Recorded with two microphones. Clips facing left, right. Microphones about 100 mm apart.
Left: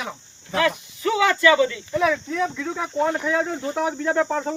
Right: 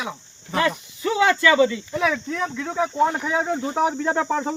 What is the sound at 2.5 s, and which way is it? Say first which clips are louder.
Speech: right 2 dB; 5° right (ahead or behind).